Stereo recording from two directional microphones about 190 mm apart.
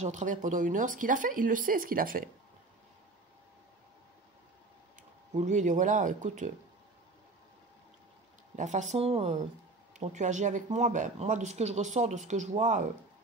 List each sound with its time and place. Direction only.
0.0 s speech: 40° right (ahead or behind)
5.3 s speech: 40° right (ahead or behind)
8.5 s speech: 40° right (ahead or behind)